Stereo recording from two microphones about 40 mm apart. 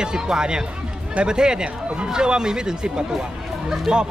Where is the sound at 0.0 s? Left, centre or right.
Centre.